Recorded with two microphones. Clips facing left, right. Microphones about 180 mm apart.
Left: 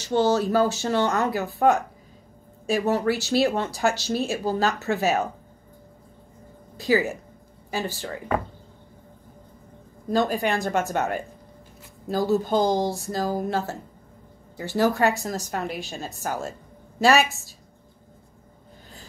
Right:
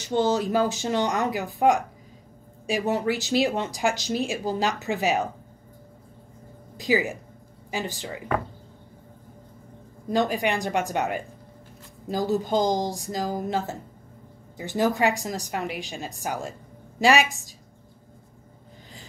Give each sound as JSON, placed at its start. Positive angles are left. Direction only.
{"t": 0.0, "sound": "speech", "side_deg": -15}
{"t": 2.9, "sound": "speech", "side_deg": -15}
{"t": 6.8, "sound": "speech", "side_deg": -15}
{"t": 10.1, "sound": "speech", "side_deg": -15}